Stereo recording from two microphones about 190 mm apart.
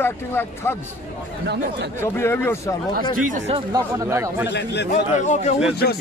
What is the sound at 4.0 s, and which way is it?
Speech, 15° right (ahead or behind).